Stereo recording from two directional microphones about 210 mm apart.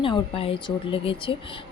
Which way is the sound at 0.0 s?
25° left (ahead or behind).